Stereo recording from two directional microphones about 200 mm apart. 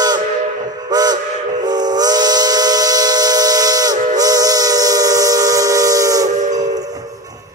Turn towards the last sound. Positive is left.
turn(degrees=-15)  # may be behind; listen again after turning